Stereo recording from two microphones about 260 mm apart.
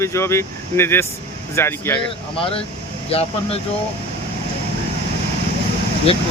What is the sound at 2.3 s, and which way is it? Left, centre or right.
Speech, left.